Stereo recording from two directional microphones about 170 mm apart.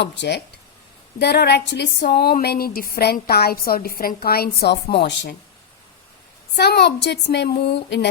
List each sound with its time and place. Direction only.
0.0 s speech: 90° left
1.2 s speech: 75° left (ahead or behind)
6.6 s speech: 75° left (ahead or behind)